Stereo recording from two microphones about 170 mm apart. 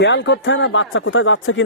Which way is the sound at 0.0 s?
90° left.